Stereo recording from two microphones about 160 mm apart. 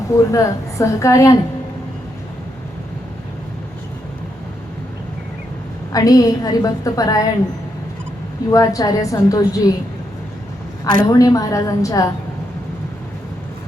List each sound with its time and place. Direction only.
0.2 s a woman's voice: 20° left (ahead or behind)
5.9 s a woman's voice: 25° left (ahead or behind)
8.4 s a woman's voice: 20° left (ahead or behind)
11.0 s a woman's voice: 20° left (ahead or behind)